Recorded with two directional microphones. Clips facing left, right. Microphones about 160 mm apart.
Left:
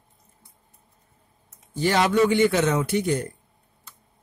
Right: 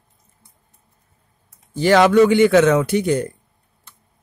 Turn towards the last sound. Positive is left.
turn(degrees=-90)